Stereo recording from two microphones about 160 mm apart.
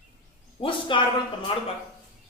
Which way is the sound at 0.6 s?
30° left (ahead or behind).